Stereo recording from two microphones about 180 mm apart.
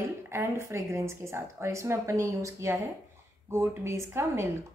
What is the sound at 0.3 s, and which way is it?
Speech, 15° right (ahead or behind).